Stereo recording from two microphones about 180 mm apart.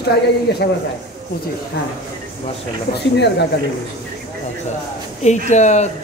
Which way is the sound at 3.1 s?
70° left (ahead or behind).